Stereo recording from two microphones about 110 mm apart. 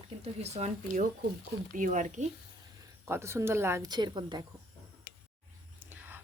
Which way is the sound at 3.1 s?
25° right (ahead or behind).